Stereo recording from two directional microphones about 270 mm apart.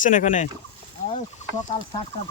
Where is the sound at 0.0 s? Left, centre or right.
Left.